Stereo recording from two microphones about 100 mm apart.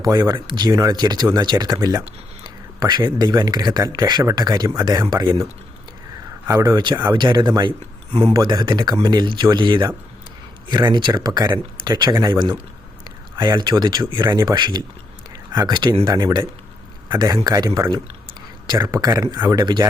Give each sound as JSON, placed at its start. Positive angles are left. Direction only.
{"t": 0.0, "sound": "speech", "side_deg": -35}
{"t": 2.4, "sound": "speech", "side_deg": -45}
{"t": 6.6, "sound": "speech", "side_deg": -40}
{"t": 19.0, "sound": "speech", "side_deg": -40}